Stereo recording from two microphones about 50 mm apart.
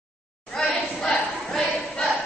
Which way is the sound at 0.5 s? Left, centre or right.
Centre.